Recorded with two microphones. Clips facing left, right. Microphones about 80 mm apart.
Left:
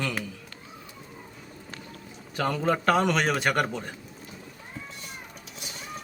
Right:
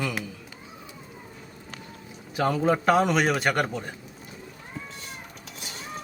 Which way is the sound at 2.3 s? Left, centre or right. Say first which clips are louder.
Right 3 dB; centre.